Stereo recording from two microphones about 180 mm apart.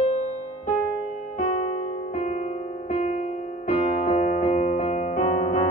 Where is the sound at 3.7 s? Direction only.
35° left (ahead or behind).